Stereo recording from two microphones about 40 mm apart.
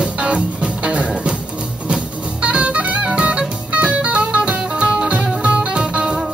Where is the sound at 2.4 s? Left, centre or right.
Right.